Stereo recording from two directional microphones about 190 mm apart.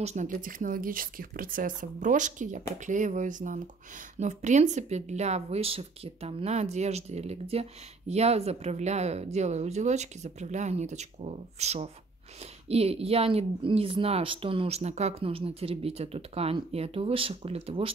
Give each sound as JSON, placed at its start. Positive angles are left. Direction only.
{"t": 0.0, "sound": "speech", "side_deg": -40}